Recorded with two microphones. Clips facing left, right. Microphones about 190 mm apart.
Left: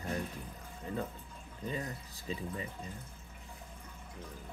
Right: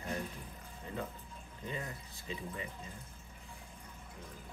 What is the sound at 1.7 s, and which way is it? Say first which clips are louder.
Speech: left 3 dB; 35° left (ahead or behind).